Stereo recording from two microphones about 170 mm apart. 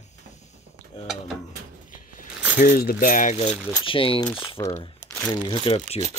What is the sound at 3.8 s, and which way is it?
Speech, 30° left (ahead or behind).